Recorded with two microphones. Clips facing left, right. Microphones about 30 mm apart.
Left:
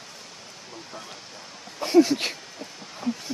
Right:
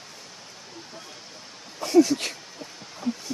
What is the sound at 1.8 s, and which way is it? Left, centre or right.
Speech, left.